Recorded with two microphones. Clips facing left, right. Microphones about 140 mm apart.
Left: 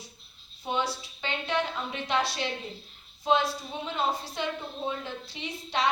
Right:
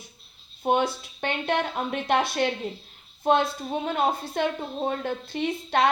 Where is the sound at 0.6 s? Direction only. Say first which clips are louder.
Right 7 dB; 55° right (ahead or behind).